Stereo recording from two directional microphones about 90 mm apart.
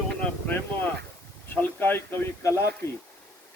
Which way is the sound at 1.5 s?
20° left (ahead or behind).